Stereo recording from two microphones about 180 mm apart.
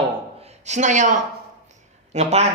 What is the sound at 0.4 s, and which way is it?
Speech, 40° right (ahead or behind).